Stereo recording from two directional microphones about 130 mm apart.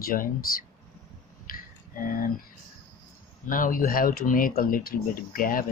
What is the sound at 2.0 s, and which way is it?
Speech, 90° left.